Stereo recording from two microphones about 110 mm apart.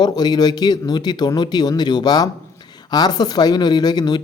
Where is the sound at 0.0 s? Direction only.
40° left (ahead or behind).